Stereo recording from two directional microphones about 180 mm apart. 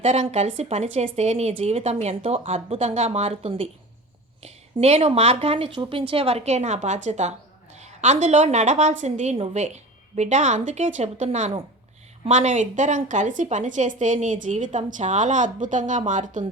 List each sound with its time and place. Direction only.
0.0 s a woman's voice: 40° right (ahead or behind)